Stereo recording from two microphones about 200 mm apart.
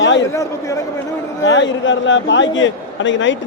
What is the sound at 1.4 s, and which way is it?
A man's voice, 70° left (ahead or behind).